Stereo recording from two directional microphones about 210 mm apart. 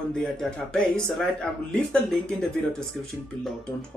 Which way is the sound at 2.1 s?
5° left (ahead or behind).